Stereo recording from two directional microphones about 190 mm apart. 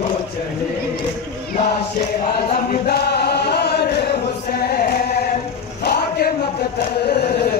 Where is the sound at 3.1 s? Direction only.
60° left (ahead or behind).